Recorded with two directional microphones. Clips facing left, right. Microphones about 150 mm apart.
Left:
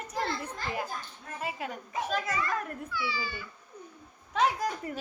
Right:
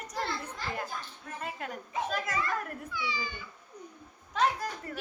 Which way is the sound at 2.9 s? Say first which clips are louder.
Left 1 dB; 20° right (ahead or behind).